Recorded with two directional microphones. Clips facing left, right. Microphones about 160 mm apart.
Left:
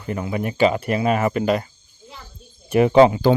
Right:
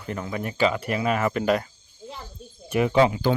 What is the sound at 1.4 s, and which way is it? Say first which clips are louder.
Speech: left 2 dB; 5° left (ahead or behind).